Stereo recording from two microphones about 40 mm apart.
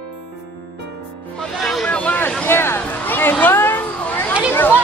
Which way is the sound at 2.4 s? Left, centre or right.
Left.